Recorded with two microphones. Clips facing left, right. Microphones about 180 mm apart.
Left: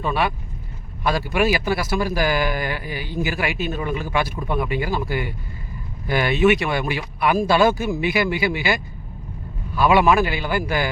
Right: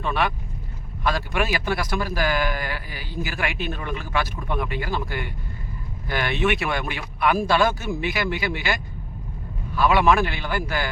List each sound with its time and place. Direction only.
0.0 s speech: 10° left (ahead or behind)
3.4 s speech: 5° left (ahead or behind)